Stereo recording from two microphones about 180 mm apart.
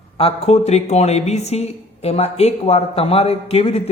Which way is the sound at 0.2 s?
35° left (ahead or behind).